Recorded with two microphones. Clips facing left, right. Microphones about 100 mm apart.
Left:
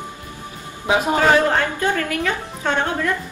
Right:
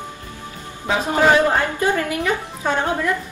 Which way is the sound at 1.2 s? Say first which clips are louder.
Right 4 dB; 15° right (ahead or behind).